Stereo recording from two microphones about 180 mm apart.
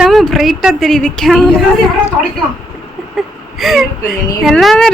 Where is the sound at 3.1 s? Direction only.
Centre (ahead or behind).